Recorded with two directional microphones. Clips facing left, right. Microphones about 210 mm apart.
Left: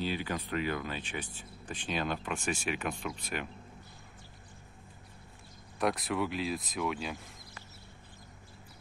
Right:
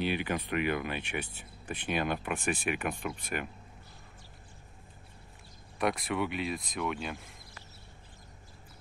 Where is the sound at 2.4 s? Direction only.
55° right (ahead or behind).